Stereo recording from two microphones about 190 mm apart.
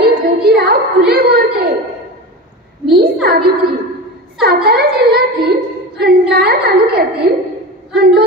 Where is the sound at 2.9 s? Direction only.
55° right (ahead or behind).